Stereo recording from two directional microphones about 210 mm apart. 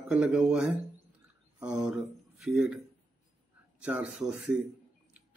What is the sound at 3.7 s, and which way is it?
Speech, 5° right (ahead or behind).